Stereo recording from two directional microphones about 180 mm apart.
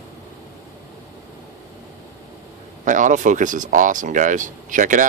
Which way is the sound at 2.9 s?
45° right (ahead or behind).